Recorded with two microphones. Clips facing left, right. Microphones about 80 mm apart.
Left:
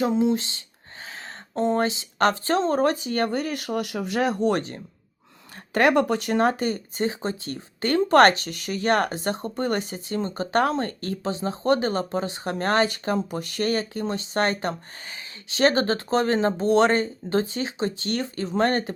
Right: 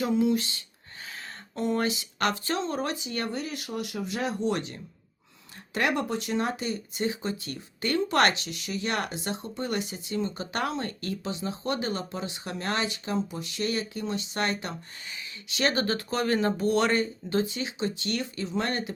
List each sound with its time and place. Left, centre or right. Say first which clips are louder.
0.0 s speech: left 3 dB; left
1.5 s speech: left 5 dB; left
5.7 s speech: left 8 dB; left